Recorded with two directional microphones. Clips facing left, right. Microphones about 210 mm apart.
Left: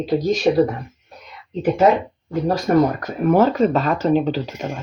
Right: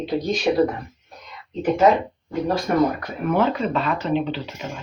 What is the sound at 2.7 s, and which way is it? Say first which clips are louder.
Speech: left 5 dB; 45° left (ahead or behind).